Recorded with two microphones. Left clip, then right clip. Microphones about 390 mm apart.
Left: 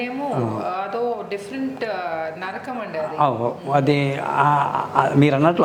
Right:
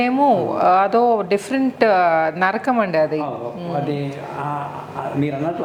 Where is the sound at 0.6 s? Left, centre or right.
Right.